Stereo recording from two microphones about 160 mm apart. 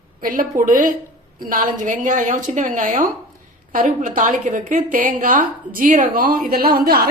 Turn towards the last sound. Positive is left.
turn(degrees=-70)  # may be behind; listen again after turning